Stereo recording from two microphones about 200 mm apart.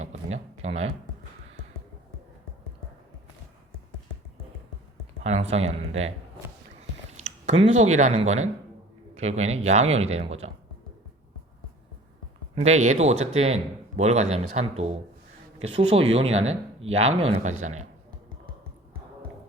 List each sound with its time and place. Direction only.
0.0 s a sound: 35° right (ahead or behind)
5.2 s speech: 30° right (ahead or behind)
7.2 s speech: 35° right (ahead or behind)
12.5 s speech: 35° right (ahead or behind)